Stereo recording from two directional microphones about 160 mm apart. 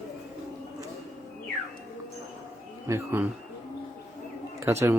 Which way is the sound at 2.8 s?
15° right (ahead or behind).